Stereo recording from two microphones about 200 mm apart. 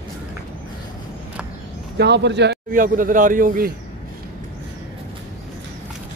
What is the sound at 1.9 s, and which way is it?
Speech, 60° right (ahead or behind).